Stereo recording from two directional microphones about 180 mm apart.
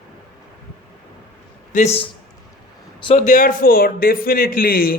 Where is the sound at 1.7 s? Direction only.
40° left (ahead or behind).